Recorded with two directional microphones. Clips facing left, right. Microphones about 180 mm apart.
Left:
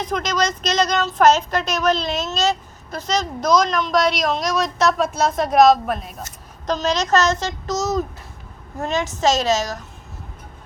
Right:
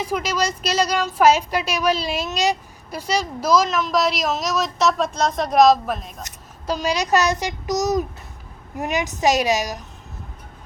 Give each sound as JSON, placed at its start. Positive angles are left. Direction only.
{"t": 0.0, "sound": "speech", "side_deg": -10}
{"t": 6.7, "sound": "speech", "side_deg": -10}